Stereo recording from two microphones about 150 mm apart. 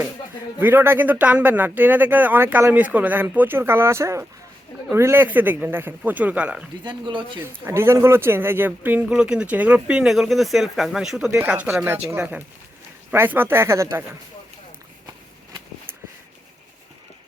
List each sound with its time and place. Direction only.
0.6 s speech: 15° right (ahead or behind)
6.8 s speech: 30° right (ahead or behind)
7.3 s speech: 15° right (ahead or behind)